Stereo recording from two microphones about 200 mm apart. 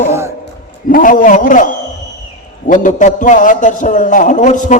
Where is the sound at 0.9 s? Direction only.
40° left (ahead or behind).